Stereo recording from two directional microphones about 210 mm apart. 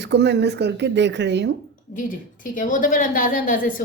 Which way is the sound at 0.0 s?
55° right (ahead or behind).